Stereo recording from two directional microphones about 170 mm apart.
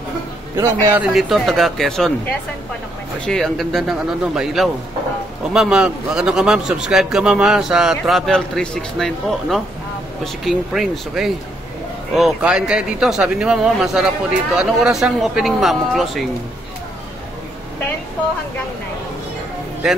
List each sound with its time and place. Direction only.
0.6 s a man's voice: 15° right (ahead or behind)
1.1 s a man's voice: centre (ahead or behind)
3.3 s a man's voice: centre (ahead or behind)